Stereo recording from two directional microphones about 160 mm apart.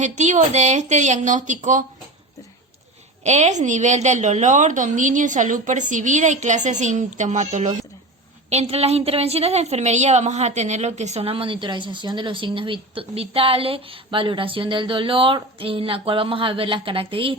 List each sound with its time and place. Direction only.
0.0 s a woman's voice: 50° right (ahead or behind)
3.2 s a woman's voice: 45° right (ahead or behind)